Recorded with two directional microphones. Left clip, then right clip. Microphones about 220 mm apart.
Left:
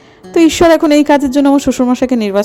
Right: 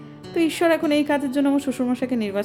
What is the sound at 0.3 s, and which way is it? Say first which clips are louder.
A woman's voice: left 12 dB; 35° left (ahead or behind).